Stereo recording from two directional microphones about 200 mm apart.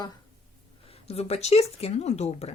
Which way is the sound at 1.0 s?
30° left (ahead or behind).